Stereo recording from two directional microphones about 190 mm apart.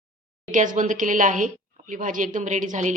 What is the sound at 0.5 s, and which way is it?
A woman's voice, 45° right (ahead or behind).